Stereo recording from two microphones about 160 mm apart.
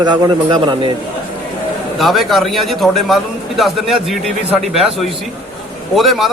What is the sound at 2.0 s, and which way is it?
A man's voice, centre (ahead or behind).